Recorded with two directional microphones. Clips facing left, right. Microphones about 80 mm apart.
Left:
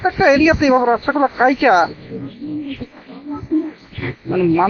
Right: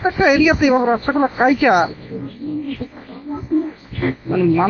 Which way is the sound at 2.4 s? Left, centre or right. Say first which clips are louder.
Right 1 dB; right.